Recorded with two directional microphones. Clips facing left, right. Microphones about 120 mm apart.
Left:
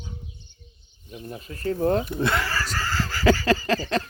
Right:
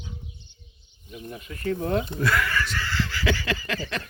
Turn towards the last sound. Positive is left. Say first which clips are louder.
# left 7 dB
turn(degrees=35)  # may be behind; listen again after turning